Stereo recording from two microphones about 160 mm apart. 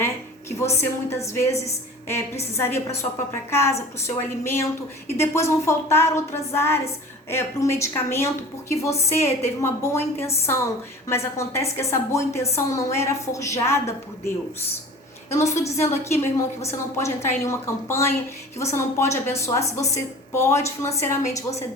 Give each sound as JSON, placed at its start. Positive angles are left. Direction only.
{"t": 0.8, "sound": "a woman's voice", "side_deg": 15}
{"t": 15.3, "sound": "a woman's voice", "side_deg": 20}